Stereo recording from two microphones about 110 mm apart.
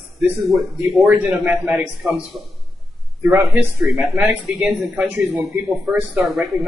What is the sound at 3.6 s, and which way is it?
Speech, 20° right (ahead or behind).